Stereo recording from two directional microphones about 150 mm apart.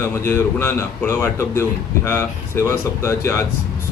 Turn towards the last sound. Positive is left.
turn(degrees=20)  # may be behind; listen again after turning